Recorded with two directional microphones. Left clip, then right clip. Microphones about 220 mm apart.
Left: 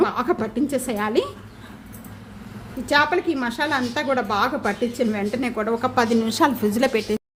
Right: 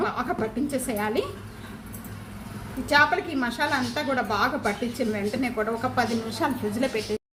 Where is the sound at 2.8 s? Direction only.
40° left (ahead or behind).